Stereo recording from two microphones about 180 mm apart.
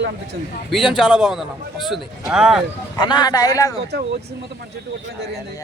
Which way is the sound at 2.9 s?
25° left (ahead or behind).